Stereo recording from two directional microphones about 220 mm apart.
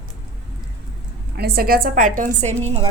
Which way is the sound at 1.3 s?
45° right (ahead or behind).